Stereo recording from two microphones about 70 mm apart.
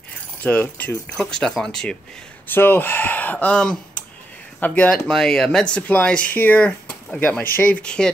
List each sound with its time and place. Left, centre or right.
0.4 s speech: left
1.1 s speech: centre
2.4 s speech: left
4.8 s speech: centre